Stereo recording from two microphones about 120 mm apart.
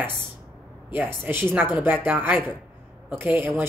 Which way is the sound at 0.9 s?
15° right (ahead or behind).